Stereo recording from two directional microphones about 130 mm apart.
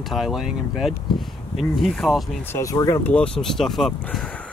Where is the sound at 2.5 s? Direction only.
25° left (ahead or behind).